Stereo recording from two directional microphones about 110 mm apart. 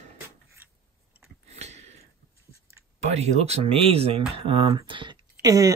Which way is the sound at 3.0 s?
80° right.